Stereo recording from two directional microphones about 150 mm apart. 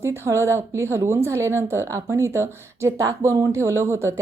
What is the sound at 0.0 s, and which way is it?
Speech, 20° right (ahead or behind).